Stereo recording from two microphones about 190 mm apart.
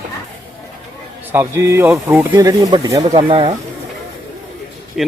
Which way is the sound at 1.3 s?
15° right (ahead or behind).